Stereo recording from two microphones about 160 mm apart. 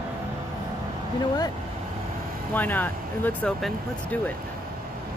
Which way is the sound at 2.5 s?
10° left (ahead or behind).